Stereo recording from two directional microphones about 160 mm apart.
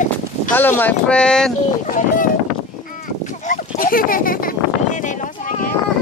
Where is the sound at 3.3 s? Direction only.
55° left (ahead or behind).